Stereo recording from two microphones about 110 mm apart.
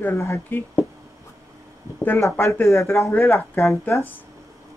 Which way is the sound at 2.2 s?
25° left (ahead or behind).